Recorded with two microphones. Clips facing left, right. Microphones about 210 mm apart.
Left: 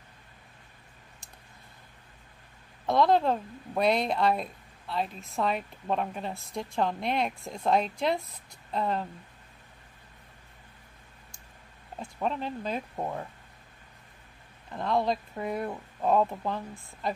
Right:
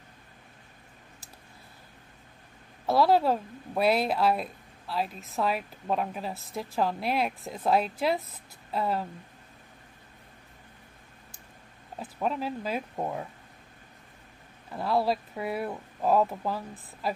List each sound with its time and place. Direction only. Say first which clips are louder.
2.9 s a woman's voice: right 1 dB; 5° right (ahead or behind)
12.0 s a woman's voice: right 1 dB; 5° right (ahead or behind)
14.7 s a woman's voice: right 1 dB; 5° right (ahead or behind)